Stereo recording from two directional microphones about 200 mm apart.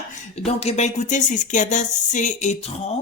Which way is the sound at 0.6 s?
35° left (ahead or behind).